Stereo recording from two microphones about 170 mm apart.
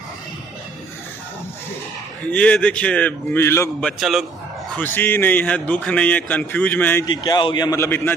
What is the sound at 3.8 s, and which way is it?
Speech, centre (ahead or behind).